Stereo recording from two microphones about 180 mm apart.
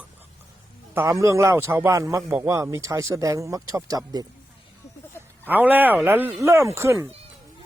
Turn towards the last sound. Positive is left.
turn(degrees=-15)  # may be behind; listen again after turning